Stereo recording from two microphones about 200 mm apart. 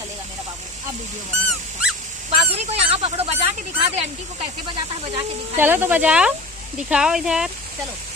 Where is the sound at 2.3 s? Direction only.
30° right (ahead or behind).